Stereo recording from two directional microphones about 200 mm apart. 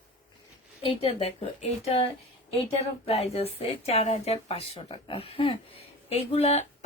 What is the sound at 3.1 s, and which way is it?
Speech, 30° left (ahead or behind).